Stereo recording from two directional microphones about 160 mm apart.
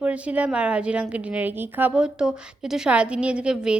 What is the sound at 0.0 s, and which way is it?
Speech, 10° right (ahead or behind).